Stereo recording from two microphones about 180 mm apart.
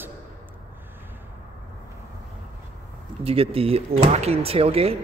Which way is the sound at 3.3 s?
30° right (ahead or behind).